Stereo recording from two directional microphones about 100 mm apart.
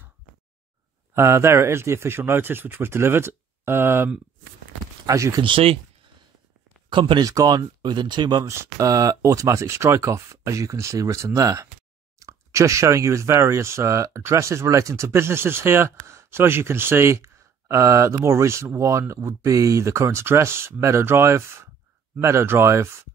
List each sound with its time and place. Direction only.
1.1 s speech: 30° right (ahead or behind)
5.4 s speech: 65° right (ahead or behind)
6.9 s speech: 55° right (ahead or behind)
7.2 s speech: 40° right (ahead or behind)
8.5 s speech: 30° right (ahead or behind)